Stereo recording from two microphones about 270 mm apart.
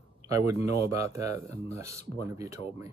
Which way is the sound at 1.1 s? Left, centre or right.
Centre.